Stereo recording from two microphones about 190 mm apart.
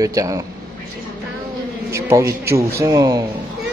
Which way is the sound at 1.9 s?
15° right (ahead or behind).